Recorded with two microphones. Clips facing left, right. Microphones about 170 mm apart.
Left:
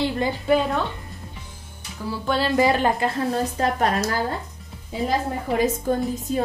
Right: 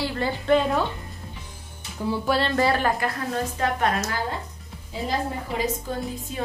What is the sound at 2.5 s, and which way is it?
A woman's voice, 15° left (ahead or behind).